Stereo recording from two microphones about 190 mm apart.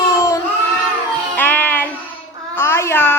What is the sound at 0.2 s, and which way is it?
Child singing, 20° left (ahead or behind).